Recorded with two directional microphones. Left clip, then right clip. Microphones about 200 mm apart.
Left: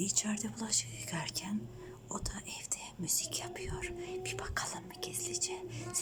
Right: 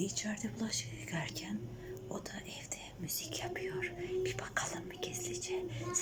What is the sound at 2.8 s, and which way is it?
Speech, 5° left (ahead or behind).